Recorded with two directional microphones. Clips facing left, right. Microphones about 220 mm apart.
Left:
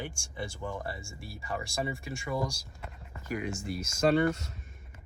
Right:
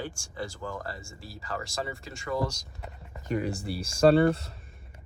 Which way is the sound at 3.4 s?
35° right (ahead or behind).